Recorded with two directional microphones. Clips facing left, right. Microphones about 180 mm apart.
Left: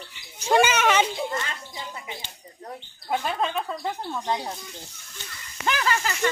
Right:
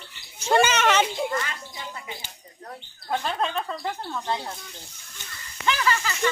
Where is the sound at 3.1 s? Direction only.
5° left (ahead or behind).